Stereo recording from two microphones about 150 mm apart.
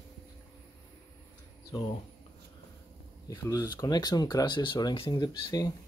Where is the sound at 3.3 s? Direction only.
20° left (ahead or behind).